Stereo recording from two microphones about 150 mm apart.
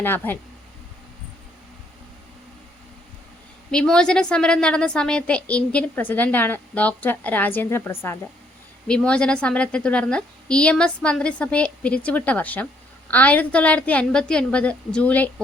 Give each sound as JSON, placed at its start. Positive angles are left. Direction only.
{"t": 0.0, "sound": "a woman's voice", "side_deg": 15}
{"t": 3.7, "sound": "a woman's voice", "side_deg": 5}
{"t": 8.9, "sound": "a woman's voice", "side_deg": 5}